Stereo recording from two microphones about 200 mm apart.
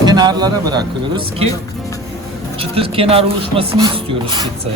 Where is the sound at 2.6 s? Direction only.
30° right (ahead or behind).